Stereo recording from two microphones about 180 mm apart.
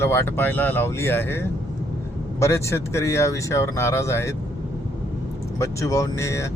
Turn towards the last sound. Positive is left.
turn(degrees=15)  # may be behind; listen again after turning